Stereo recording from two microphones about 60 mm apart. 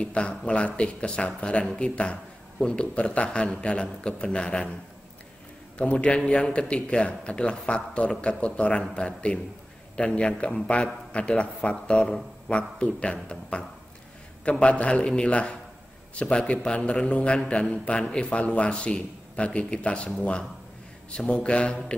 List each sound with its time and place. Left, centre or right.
0.0 s a man's voice: centre
5.8 s a man's voice: left